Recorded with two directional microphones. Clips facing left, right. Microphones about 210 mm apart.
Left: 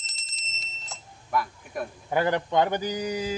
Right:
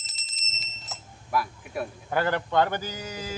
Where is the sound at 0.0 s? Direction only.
Centre (ahead or behind).